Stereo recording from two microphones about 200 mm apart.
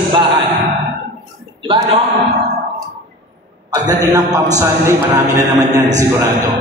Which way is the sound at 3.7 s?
15° right (ahead or behind).